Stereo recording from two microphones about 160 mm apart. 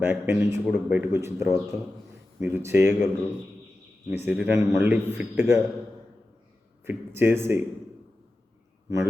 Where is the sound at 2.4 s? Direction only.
15° right (ahead or behind).